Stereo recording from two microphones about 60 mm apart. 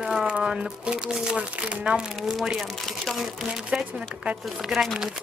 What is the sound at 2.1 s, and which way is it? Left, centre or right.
Speech, centre.